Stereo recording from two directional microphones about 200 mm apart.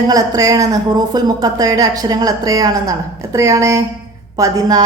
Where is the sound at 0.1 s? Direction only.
15° right (ahead or behind).